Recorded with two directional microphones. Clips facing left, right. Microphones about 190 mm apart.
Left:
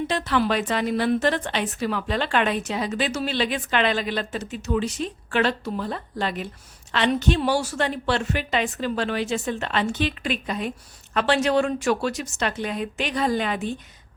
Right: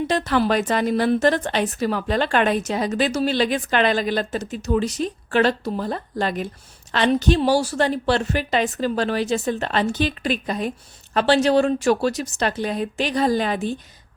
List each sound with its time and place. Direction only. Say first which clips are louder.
0.1 s a woman's voice: right 4 dB; 40° right (ahead or behind)